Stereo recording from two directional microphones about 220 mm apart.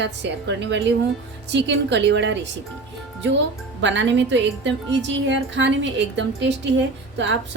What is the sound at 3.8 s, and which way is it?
A woman's voice, 55° right (ahead or behind).